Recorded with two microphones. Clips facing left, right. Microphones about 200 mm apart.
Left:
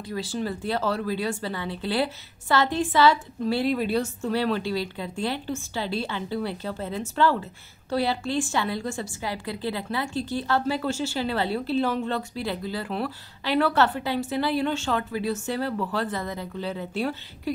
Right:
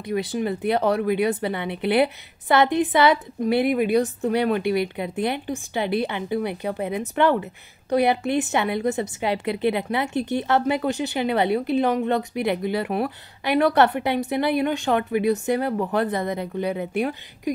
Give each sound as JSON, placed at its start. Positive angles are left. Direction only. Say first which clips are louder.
{"t": 0.0, "sound": "a woman's voice", "louder": "right 5 dB", "side_deg": -20}
{"t": 13.7, "sound": "a woman's voice", "louder": "right 4 dB", "side_deg": -65}
{"t": 14.6, "sound": "a woman's voice", "louder": "right 4 dB", "side_deg": -15}